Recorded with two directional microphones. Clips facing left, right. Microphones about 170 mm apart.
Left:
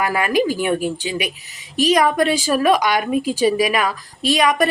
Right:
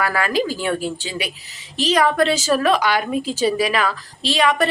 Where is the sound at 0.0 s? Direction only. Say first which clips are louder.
Left 2 dB; 15° left (ahead or behind).